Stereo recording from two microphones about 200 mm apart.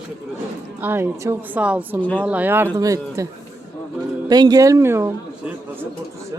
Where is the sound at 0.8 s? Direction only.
10° right (ahead or behind).